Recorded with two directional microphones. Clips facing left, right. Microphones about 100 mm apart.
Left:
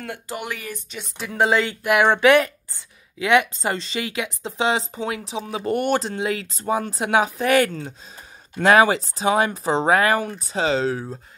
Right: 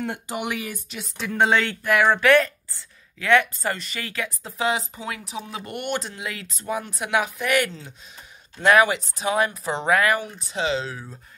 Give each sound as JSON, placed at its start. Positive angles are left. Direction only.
{"t": 0.1, "sound": "speech", "side_deg": -20}
{"t": 0.8, "sound": "a woman's voice", "side_deg": 0}
{"t": 1.8, "sound": "speech", "side_deg": 20}
{"t": 5.7, "sound": "speech", "side_deg": 35}
{"t": 10.1, "sound": "speech", "side_deg": 40}